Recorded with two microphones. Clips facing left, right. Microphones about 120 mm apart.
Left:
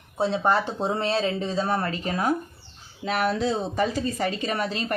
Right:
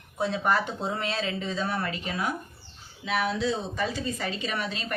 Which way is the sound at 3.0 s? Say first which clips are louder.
Left 3 dB; 50° left (ahead or behind).